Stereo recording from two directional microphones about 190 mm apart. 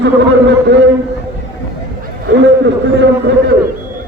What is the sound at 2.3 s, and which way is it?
A man's voice, 65° right (ahead or behind).